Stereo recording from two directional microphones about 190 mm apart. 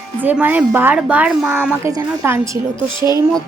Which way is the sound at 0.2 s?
10° right (ahead or behind).